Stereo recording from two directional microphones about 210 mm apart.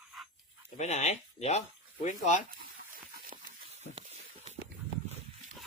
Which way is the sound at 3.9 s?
30° right (ahead or behind).